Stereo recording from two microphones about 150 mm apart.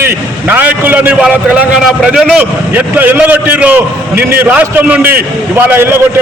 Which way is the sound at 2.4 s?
10° right (ahead or behind).